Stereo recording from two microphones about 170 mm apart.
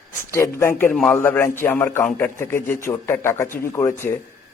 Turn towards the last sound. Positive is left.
turn(degrees=15)  # may be behind; listen again after turning